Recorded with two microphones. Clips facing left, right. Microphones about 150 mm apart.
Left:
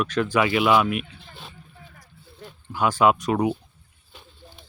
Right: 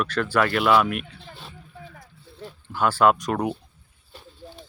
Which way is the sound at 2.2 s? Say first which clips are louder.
Right 3 dB; 30° right (ahead or behind).